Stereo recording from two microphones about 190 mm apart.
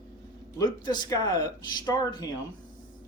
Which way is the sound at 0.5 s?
20° left (ahead or behind).